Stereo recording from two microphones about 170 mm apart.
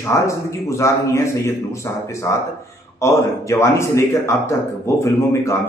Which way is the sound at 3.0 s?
15° left (ahead or behind).